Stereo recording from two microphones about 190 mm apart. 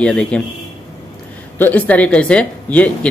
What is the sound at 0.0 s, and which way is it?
Speech, 5° left (ahead or behind).